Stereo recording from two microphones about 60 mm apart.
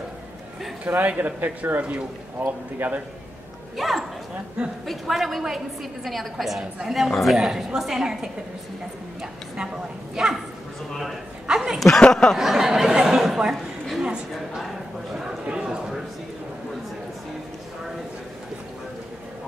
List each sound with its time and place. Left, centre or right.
0.8 s speech: right
3.7 s a woman's voice: centre
10.1 s a woman's voice: centre
11.4 s speech: centre
12.1 s speech: centre
12.4 s speech: centre
15.1 s a sound: centre